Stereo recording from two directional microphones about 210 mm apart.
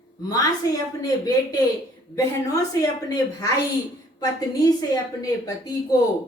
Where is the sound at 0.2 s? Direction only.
15° left (ahead or behind).